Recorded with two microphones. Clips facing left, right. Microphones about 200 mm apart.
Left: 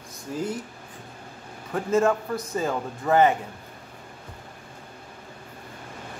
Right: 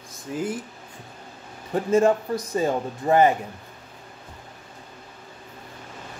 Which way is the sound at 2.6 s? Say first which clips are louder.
Right 3 dB; 25° right (ahead or behind).